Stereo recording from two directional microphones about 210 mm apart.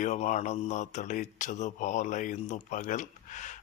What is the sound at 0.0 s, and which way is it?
Speech, 35° left (ahead or behind).